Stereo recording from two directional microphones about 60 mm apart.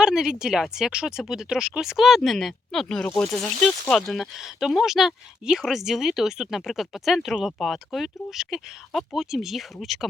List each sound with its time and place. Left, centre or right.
0.0 s speech: centre
2.9 s speech: centre
3.9 s speech: centre